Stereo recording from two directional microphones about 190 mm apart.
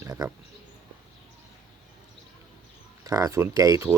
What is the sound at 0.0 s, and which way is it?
Speech, 20° right (ahead or behind).